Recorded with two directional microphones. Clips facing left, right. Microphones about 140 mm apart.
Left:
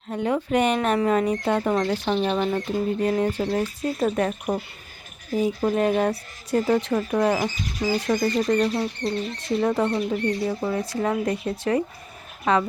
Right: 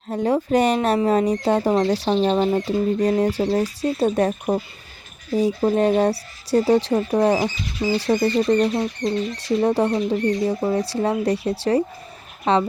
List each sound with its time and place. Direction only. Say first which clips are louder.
0.1 s speech: right 4 dB; 35° right (ahead or behind)